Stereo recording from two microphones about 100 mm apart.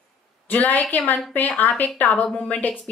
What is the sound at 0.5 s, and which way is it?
A woman's voice, 15° left (ahead or behind).